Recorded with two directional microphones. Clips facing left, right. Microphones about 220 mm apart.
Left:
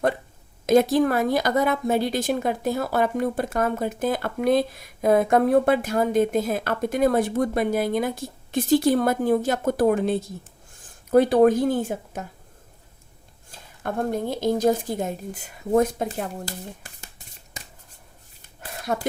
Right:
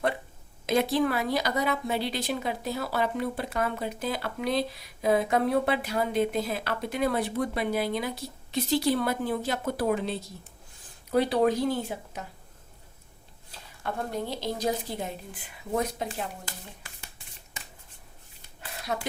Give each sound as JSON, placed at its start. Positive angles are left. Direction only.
{"t": 0.6, "sound": "speech", "side_deg": 45}
{"t": 13.5, "sound": "a woman's voice", "side_deg": 50}
{"t": 18.6, "sound": "a sound", "side_deg": 45}